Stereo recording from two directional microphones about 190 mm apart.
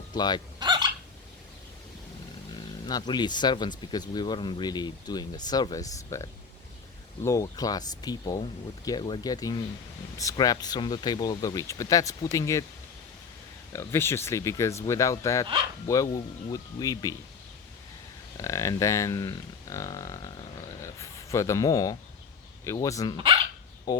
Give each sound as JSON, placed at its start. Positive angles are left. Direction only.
{"t": 0.1, "sound": "fowl", "side_deg": 20}
{"t": 0.6, "sound": "fowl", "side_deg": -20}
{"t": 2.8, "sound": "speech", "side_deg": 20}
{"t": 13.7, "sound": "speech", "side_deg": 15}
{"t": 18.3, "sound": "speech", "side_deg": 15}
{"t": 20.8, "sound": "a sound", "side_deg": 15}
{"t": 22.6, "sound": "speech", "side_deg": 15}
{"t": 23.1, "sound": "speech", "side_deg": -25}
{"t": 23.9, "sound": "speech", "side_deg": 20}